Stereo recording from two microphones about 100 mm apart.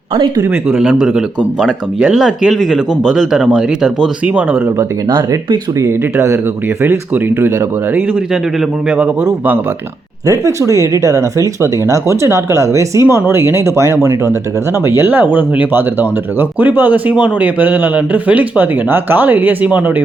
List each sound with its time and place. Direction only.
0.8 s speech: 5° right (ahead or behind)
5.0 s speech: 45° right (ahead or behind)
5.8 s speech: 30° right (ahead or behind)
10.2 s speech: 35° right (ahead or behind); by 19.8 s 15° right (ahead or behind)